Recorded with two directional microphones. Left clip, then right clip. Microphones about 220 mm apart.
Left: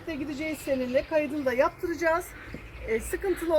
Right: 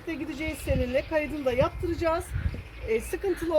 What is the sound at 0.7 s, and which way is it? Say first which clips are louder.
Speech: left 1 dB; 30° right (ahead or behind).